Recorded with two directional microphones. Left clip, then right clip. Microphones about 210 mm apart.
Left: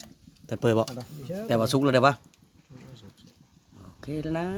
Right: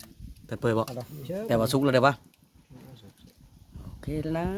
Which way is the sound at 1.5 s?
Centre (ahead or behind).